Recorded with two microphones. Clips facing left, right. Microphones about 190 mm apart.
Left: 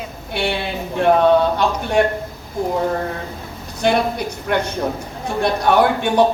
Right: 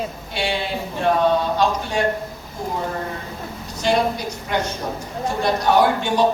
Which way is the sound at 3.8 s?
60° left (ahead or behind).